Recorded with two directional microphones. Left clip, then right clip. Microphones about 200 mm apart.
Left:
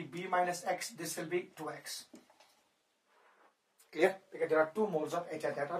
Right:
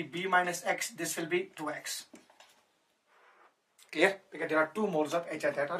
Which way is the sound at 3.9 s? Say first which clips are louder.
Right 3 dB; 20° right (ahead or behind).